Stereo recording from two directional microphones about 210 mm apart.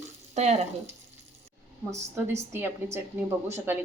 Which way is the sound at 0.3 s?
30° right (ahead or behind).